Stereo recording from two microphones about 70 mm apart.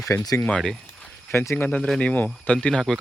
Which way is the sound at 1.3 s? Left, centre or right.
Left.